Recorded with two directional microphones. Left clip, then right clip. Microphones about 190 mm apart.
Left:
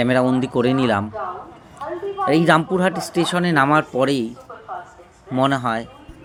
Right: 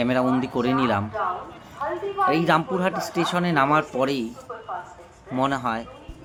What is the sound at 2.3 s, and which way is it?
Speech, 25° left (ahead or behind).